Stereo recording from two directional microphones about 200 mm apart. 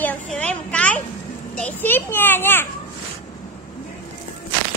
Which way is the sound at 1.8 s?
10° left (ahead or behind).